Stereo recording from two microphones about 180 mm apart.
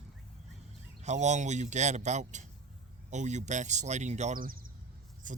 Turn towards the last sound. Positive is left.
turn(degrees=-45)  # may be behind; listen again after turning